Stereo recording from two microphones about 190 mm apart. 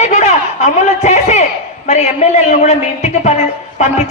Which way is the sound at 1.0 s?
35° left (ahead or behind).